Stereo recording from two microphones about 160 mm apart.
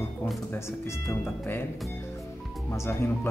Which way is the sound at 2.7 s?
15° left (ahead or behind).